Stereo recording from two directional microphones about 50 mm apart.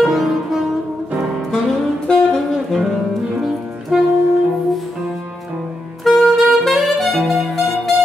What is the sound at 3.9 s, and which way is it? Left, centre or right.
Saxophone, centre.